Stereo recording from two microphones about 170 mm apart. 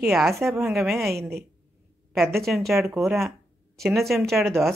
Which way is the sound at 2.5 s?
Centre (ahead or behind).